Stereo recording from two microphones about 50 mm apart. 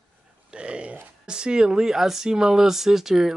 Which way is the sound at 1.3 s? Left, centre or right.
Centre.